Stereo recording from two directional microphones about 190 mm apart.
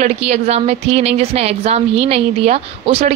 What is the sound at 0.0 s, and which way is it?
A woman's voice, 35° right (ahead or behind).